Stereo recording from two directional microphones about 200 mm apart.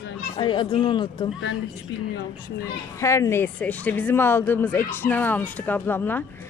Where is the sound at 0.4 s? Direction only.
25° left (ahead or behind).